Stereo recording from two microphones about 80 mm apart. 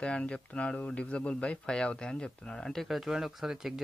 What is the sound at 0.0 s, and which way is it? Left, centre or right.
Speech, centre.